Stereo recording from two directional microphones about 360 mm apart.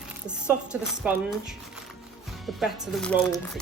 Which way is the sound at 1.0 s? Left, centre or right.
Centre.